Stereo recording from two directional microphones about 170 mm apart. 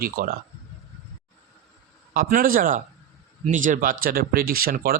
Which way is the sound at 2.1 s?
55° right (ahead or behind).